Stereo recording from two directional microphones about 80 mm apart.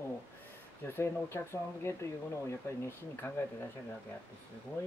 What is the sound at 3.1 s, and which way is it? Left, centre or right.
Speech, left.